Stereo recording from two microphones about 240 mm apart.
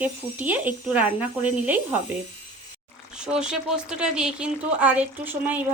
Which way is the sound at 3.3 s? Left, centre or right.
Centre.